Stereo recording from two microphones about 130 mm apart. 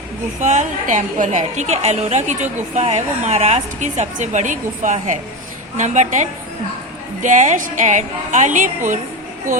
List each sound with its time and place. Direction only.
0.3 s a woman's voice: 65° right (ahead or behind)